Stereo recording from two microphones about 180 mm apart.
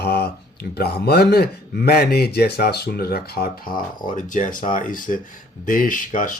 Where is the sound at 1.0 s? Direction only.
60° left (ahead or behind).